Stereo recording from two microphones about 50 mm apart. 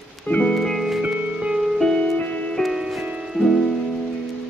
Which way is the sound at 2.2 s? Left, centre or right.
Left.